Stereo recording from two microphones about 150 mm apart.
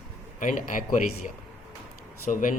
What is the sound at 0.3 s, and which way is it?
Speech, 60° left (ahead or behind).